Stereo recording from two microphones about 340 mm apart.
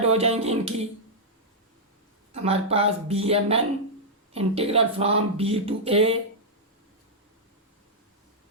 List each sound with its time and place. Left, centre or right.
0.0 s speech: centre
2.3 s speech: centre